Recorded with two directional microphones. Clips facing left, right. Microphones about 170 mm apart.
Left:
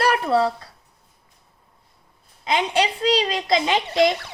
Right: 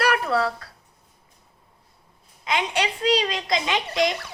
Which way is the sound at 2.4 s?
30° left (ahead or behind).